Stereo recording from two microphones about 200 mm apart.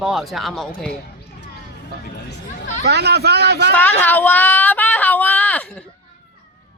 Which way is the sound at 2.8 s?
55° right (ahead or behind).